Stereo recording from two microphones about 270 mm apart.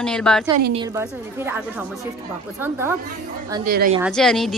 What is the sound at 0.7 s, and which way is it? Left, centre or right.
A woman's voice, centre.